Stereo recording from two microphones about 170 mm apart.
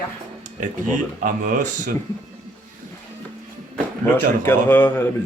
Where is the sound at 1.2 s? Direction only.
50° right (ahead or behind).